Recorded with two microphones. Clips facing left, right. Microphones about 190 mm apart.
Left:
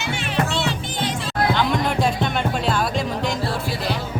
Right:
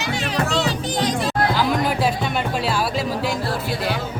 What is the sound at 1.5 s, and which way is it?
Music, 5° right (ahead or behind).